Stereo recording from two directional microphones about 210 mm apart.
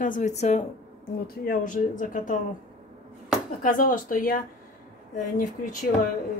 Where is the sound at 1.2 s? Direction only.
45° left (ahead or behind).